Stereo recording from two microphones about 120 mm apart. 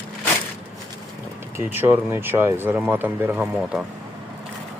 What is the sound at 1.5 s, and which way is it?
Speech, 15° right (ahead or behind).